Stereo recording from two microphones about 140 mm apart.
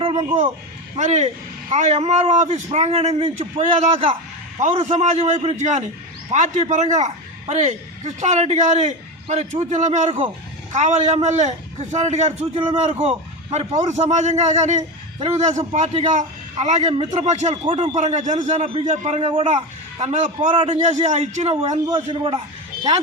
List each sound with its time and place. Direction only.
0.0 s speech: 40° right (ahead or behind)
0.9 s a man's voice: 55° right (ahead or behind)
13.8 s a man's voice: 55° right (ahead or behind)
20.6 s a man's voice: 40° right (ahead or behind)
20.8 s a man's voice: 55° right (ahead or behind)
21.8 s a man's voice: 30° right (ahead or behind)